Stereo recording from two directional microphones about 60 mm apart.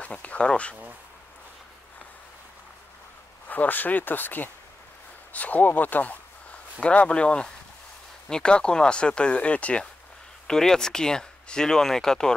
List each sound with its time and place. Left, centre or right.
0.0 s speech: left
3.4 s speech: left
10.4 s speech: centre